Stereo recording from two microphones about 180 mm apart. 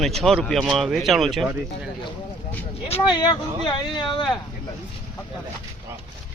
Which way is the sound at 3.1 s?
25° left (ahead or behind).